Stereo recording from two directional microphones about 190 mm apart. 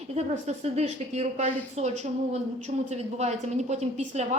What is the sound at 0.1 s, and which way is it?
Speech, 35° right (ahead or behind).